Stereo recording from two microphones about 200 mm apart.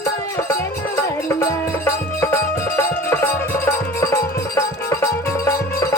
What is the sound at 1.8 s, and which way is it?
Music, 15° left (ahead or behind).